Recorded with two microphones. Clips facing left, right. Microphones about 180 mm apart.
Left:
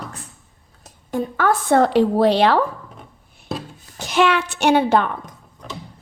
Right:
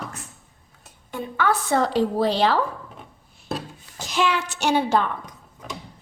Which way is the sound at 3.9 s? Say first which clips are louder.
Left 6 dB; 60° left (ahead or behind).